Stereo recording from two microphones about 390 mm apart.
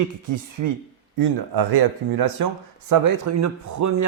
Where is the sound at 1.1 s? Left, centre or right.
Right.